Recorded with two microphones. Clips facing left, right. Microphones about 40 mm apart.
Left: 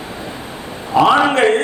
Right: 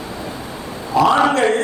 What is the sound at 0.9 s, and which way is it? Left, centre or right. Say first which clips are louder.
Speech: left 2 dB; left.